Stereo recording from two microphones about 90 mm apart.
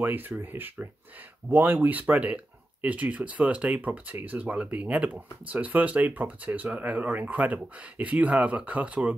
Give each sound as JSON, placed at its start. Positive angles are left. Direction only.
{"t": 0.0, "sound": "speech", "side_deg": -20}